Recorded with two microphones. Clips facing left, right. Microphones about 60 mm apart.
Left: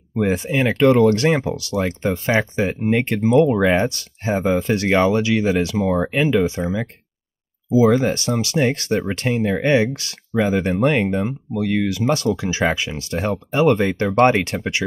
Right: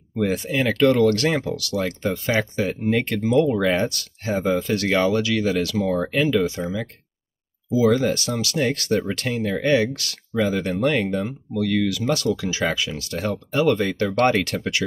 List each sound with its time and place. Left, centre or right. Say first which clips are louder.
0.1 s speech: left 3 dB; left